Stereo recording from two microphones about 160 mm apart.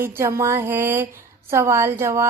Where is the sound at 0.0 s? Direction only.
15° right (ahead or behind).